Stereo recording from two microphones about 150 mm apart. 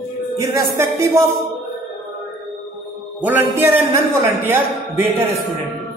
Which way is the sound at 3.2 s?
15° right (ahead or behind).